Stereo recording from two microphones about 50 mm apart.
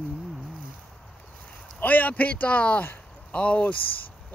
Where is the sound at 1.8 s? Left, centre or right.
Left.